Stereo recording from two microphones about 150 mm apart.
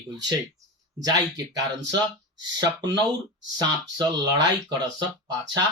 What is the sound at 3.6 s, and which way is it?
Speech, 30° right (ahead or behind).